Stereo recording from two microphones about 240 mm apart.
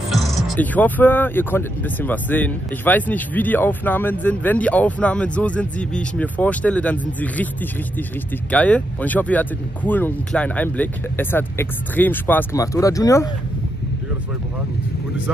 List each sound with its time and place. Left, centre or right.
0.1 s speech: centre
8.5 s speech: centre